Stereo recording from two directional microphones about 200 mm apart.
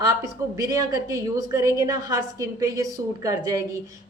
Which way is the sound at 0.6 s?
15° right (ahead or behind).